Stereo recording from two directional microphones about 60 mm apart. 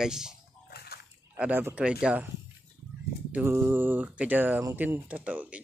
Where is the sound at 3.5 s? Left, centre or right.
Right.